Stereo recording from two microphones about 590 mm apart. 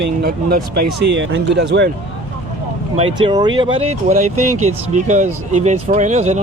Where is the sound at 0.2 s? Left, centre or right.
Centre.